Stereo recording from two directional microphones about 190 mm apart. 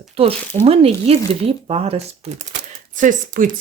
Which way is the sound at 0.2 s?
30° right (ahead or behind).